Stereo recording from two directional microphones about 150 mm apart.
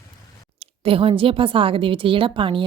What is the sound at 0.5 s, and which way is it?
Speech, 40° right (ahead or behind).